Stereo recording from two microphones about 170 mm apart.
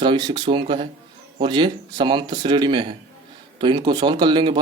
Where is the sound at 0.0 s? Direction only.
25° right (ahead or behind).